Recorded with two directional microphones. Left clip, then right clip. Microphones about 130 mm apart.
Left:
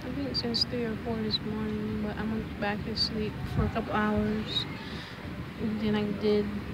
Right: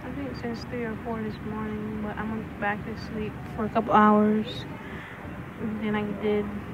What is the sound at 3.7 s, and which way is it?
Speech, 30° right (ahead or behind).